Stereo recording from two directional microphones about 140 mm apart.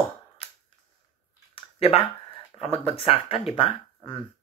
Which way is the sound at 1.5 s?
45° left (ahead or behind).